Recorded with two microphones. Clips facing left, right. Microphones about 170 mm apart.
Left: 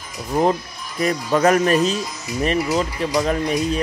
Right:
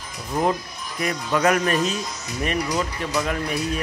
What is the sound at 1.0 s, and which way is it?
Speech, 35° left (ahead or behind).